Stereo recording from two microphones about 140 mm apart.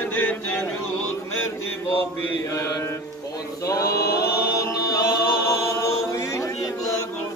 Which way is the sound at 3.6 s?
20° left (ahead or behind).